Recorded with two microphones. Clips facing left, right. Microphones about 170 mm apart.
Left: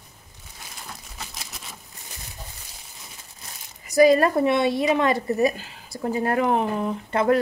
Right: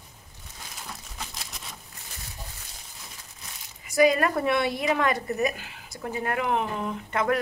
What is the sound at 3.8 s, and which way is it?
A woman's voice, 35° left (ahead or behind).